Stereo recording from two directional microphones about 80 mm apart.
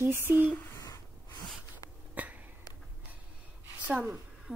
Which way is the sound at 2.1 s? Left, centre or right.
Centre.